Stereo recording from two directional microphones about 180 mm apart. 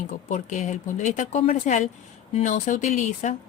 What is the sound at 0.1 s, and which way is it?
A woman's voice, 45° left (ahead or behind).